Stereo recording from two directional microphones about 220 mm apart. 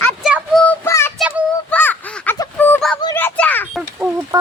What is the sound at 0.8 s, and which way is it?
Child singing, 10° left (ahead or behind).